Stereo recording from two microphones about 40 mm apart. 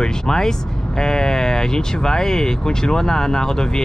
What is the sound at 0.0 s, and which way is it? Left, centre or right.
Speech, centre.